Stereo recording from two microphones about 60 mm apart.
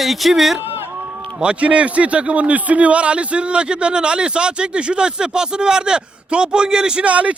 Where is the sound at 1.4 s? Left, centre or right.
Centre.